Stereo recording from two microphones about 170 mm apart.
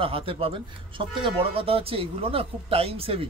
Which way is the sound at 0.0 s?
30° right (ahead or behind).